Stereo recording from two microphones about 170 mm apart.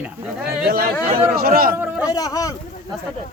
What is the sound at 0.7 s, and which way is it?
Speech, 65° right (ahead or behind).